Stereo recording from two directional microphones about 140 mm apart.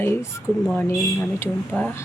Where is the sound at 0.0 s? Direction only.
20° left (ahead or behind).